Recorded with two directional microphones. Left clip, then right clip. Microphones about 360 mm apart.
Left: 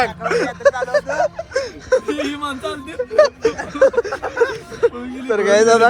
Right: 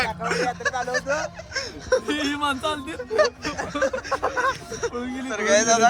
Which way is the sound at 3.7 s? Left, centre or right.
Centre.